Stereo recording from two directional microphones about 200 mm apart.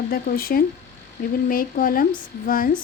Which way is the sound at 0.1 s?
45° left (ahead or behind).